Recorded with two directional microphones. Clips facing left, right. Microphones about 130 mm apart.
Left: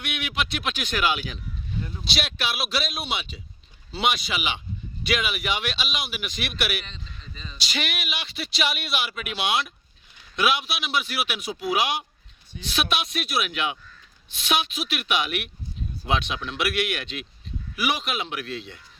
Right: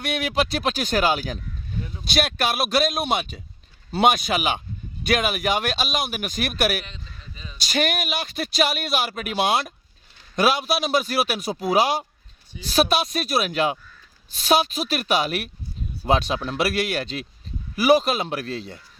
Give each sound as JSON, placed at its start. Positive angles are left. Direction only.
{"t": 0.0, "sound": "a man's voice", "side_deg": -40}
{"t": 6.8, "sound": "a sound", "side_deg": -5}
{"t": 7.6, "sound": "a man's voice", "side_deg": -45}